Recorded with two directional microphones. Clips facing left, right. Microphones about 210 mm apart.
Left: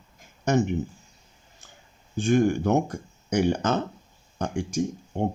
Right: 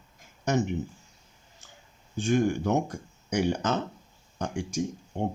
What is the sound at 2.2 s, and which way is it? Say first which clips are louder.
Speech: left 4 dB; 55° left (ahead or behind).